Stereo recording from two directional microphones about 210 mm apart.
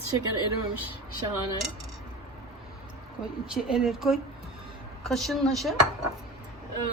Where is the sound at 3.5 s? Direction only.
5° right (ahead or behind).